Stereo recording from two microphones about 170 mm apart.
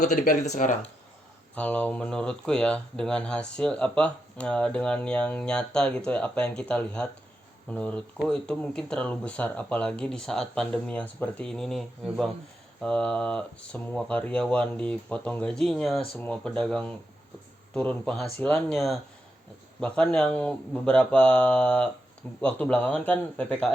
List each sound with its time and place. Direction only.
0.0 s speech: 45° left (ahead or behind)
1.5 s speech: 10° left (ahead or behind)